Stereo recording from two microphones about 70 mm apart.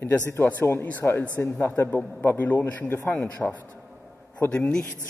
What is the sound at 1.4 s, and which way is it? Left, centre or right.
Speech, left.